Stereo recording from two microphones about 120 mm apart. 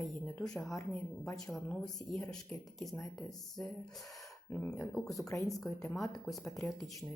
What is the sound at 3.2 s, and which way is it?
A woman's voice, centre (ahead or behind).